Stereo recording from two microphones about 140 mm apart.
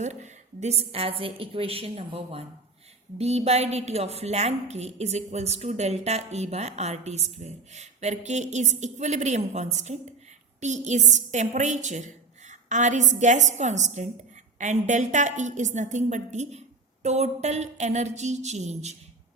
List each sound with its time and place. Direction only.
0.0 s a woman's voice: 55° right (ahead or behind)